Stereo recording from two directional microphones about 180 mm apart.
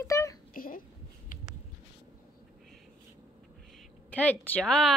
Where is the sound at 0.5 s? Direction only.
55° left (ahead or behind).